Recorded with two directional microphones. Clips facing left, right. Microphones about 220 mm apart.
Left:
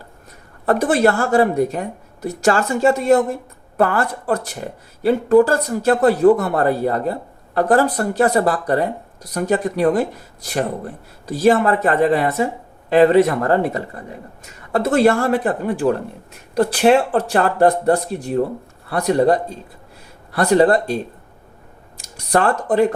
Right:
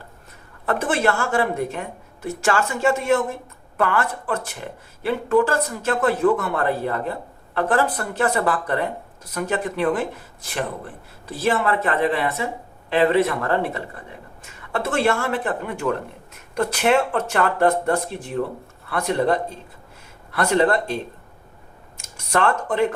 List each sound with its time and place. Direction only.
0.6 s speech: 40° left (ahead or behind)